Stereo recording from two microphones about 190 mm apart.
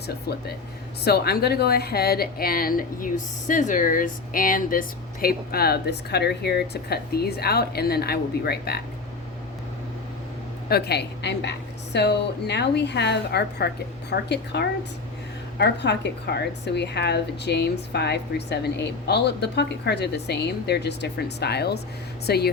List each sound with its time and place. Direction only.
0.1 s speech: 55° left (ahead or behind)
10.7 s speech: 55° left (ahead or behind)